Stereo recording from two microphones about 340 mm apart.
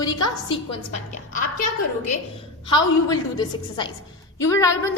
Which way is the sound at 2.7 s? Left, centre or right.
Centre.